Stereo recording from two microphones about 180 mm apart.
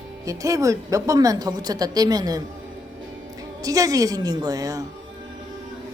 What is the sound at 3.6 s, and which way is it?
A woman's voice, 20° right (ahead or behind).